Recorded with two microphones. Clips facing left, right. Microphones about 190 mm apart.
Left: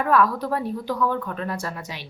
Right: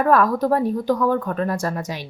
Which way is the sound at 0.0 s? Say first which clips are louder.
Right 4 dB; 45° right (ahead or behind).